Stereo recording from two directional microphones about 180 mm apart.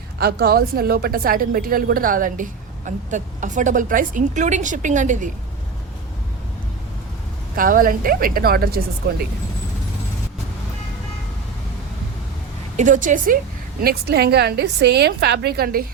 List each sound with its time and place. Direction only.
0.2 s a woman's voice: 60° right (ahead or behind); by 5.3 s 45° right (ahead or behind)
7.5 s a woman's voice: 50° right (ahead or behind)
12.7 s a woman's voice: 45° right (ahead or behind)
13.8 s a woman's voice: 60° right (ahead or behind)